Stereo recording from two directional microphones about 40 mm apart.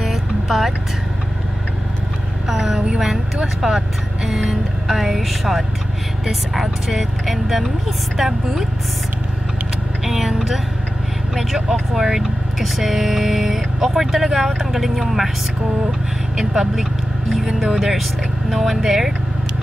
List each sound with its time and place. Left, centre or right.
0.0 s music: centre
2.4 s vehicle: centre
3.6 s speech: centre
10.0 s speech: centre
16.3 s speech: centre
17.7 s speech: centre